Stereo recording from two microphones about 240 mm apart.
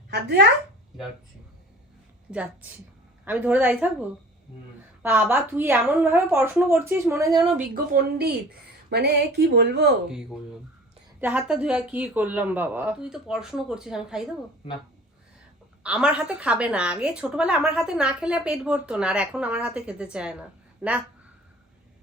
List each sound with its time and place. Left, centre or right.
0.1 s speech: right
2.3 s speech: centre
5.0 s speech: centre
7.7 s speech: right
11.2 s a woman's voice: centre
15.8 s a woman's voice: centre